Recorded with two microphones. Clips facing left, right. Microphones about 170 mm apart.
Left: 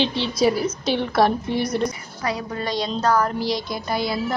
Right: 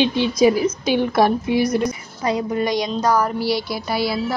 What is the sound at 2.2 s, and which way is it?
A woman's voice, 20° right (ahead or behind).